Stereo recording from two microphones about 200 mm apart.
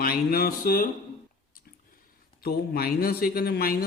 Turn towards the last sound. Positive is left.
turn(degrees=50)  # may be behind; listen again after turning